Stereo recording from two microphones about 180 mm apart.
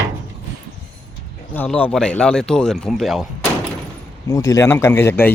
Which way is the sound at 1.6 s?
5° left (ahead or behind).